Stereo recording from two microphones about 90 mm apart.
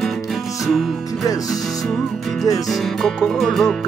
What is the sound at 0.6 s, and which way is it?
Music, centre (ahead or behind).